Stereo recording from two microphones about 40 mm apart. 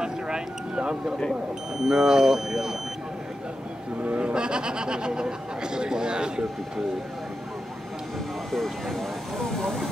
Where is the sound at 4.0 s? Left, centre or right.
Right.